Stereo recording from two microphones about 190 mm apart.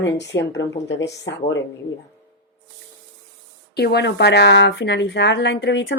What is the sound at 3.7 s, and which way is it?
Speech, 60° left (ahead or behind).